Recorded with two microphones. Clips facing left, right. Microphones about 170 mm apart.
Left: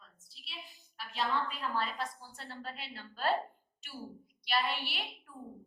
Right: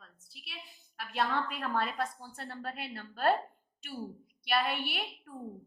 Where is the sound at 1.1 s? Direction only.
65° right (ahead or behind).